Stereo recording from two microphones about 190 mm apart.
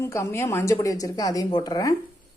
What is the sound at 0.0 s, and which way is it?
A woman's voice, 15° left (ahead or behind).